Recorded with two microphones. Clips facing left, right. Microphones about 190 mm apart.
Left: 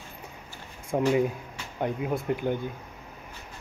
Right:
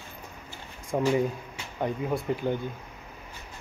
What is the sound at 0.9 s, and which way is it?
Speech, 15° left (ahead or behind).